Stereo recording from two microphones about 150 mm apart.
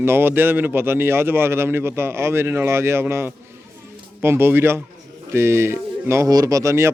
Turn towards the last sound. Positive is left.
turn(degrees=-20)  # may be behind; listen again after turning